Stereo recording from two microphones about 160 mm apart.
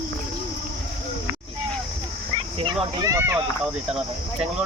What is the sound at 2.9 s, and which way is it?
Speech, 20° right (ahead or behind).